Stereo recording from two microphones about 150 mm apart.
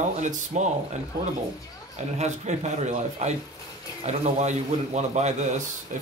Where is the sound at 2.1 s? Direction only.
50° right (ahead or behind).